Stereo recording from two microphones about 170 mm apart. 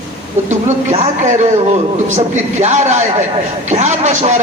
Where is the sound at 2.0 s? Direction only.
45° right (ahead or behind).